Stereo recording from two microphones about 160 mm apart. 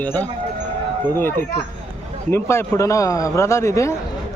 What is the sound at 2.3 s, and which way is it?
A man's voice, 15° left (ahead or behind).